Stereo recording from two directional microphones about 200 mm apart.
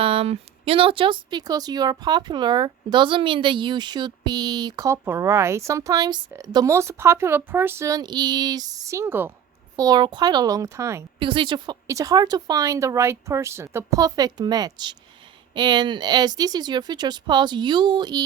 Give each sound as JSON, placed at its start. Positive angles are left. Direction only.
{"t": 0.0, "sound": "speech", "side_deg": -30}
{"t": 11.2, "sound": "speech", "side_deg": -25}